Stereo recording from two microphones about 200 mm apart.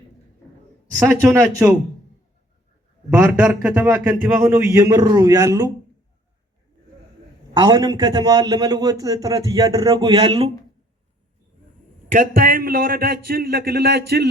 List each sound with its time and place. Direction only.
1.2 s a man's voice: 15° right (ahead or behind)
3.1 s a man's voice: 5° right (ahead or behind)
7.6 s a man's voice: 20° right (ahead or behind)
12.1 s a man's voice: 45° right (ahead or behind)